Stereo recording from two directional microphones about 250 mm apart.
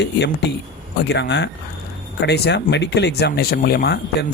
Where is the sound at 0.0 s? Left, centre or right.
Left.